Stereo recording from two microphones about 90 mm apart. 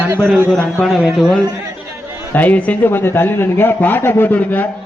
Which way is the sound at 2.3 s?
15° left (ahead or behind).